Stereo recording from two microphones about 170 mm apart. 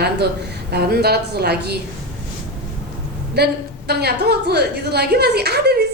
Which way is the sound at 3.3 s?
70° right (ahead or behind).